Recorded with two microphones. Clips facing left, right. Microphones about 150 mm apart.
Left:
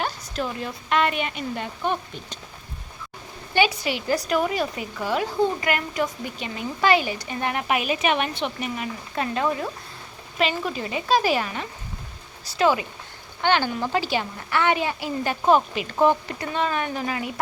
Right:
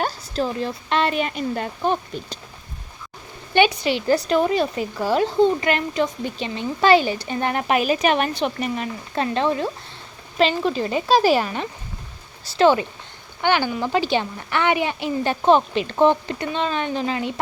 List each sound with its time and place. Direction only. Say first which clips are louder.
0.0 s a woman's voice: right 4 dB; 35° right (ahead or behind)
3.5 s a woman's voice: right 4 dB; 25° right (ahead or behind)
13.4 s a woman's voice: right 2 dB; 15° right (ahead or behind)